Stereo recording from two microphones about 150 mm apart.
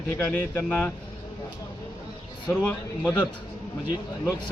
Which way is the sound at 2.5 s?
10° left (ahead or behind).